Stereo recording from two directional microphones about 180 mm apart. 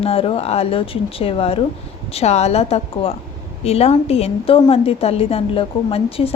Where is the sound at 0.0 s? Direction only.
30° left (ahead or behind).